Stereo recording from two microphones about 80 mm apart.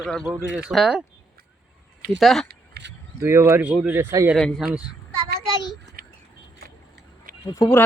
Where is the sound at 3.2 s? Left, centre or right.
Right.